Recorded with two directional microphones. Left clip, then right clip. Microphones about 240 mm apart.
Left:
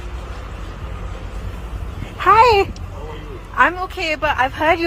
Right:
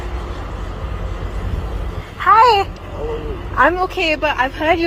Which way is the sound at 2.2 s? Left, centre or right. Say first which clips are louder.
Right 1 dB; left.